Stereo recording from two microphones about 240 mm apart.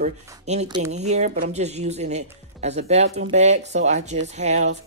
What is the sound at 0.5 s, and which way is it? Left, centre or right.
Speech, right.